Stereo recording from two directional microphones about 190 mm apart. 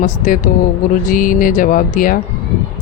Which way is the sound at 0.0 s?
45° left (ahead or behind).